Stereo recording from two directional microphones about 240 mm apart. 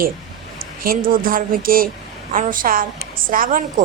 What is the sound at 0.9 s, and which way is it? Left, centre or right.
A woman's voice, right.